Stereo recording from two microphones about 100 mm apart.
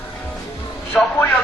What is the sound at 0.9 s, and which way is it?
Speech, 5° left (ahead or behind).